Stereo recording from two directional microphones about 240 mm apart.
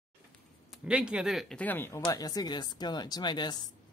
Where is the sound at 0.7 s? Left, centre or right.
Centre.